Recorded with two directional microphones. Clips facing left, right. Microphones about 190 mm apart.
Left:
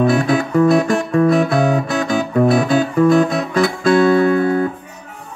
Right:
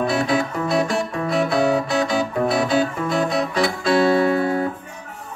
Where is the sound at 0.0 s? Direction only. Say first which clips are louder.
Left 5 dB; 50° left (ahead or behind).